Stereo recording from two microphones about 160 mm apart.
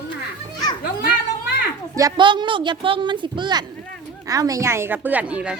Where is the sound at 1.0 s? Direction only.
90° left.